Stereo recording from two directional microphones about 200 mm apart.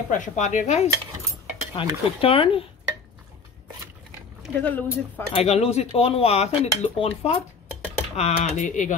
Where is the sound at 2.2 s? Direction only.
25° left (ahead or behind).